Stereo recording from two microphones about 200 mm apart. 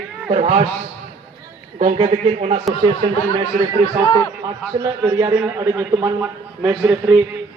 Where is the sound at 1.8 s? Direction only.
30° right (ahead or behind).